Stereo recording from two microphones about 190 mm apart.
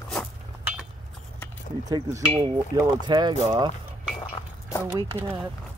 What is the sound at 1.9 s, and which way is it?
Speech, 15° right (ahead or behind).